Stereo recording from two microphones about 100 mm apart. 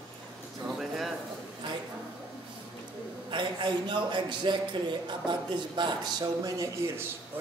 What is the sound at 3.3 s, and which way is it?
A man's voice, 50° right (ahead or behind).